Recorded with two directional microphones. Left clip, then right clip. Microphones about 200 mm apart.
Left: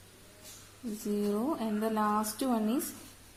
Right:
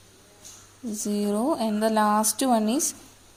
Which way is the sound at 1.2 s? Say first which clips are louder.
Right 8 dB; 30° right (ahead or behind).